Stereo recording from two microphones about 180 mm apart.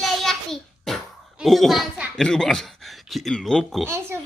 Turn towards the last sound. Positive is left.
turn(degrees=-15)  # may be behind; listen again after turning